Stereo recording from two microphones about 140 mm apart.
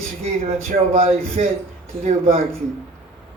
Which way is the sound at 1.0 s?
50° right (ahead or behind).